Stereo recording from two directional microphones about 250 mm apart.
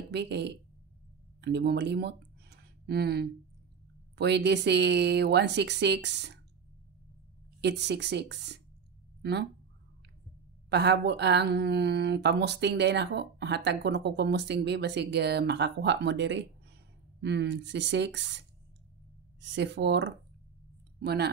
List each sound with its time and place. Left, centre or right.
0.1 s speech: right
7.6 s speech: right
10.7 s speech: right
19.4 s speech: right